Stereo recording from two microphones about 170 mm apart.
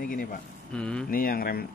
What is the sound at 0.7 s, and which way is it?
Speech, 5° left (ahead or behind).